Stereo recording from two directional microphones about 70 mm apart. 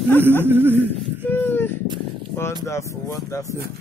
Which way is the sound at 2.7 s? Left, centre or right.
Left.